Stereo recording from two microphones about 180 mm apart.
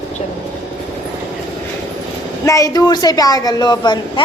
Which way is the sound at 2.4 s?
20° left (ahead or behind).